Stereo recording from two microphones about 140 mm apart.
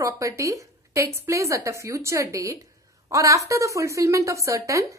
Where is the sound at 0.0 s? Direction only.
20° right (ahead or behind).